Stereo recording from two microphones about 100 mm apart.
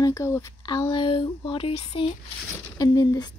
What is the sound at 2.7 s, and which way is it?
Speech, 40° left (ahead or behind).